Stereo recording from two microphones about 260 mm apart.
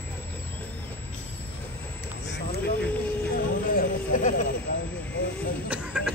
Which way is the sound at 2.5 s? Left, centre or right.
Left.